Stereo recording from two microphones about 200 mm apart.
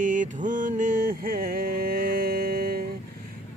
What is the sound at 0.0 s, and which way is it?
Music, 40° right (ahead or behind).